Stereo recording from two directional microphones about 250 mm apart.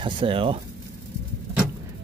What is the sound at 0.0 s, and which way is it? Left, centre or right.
Speech, right.